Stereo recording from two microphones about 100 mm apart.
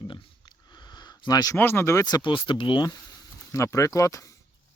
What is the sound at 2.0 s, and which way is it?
Speech, 45° left (ahead or behind).